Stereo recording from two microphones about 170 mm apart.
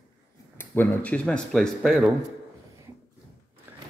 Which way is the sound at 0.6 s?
10° left (ahead or behind).